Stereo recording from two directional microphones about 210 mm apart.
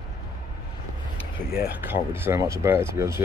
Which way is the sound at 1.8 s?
10° right (ahead or behind).